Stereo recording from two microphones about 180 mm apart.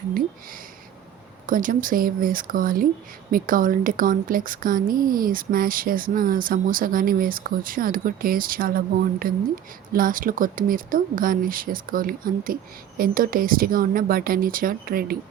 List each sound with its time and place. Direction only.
1.5 s a woman's voice: 50° right (ahead or behind)